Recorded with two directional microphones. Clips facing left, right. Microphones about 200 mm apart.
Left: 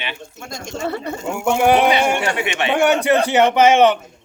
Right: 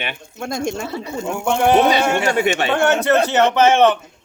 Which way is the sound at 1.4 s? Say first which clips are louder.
Even; 10° left (ahead or behind).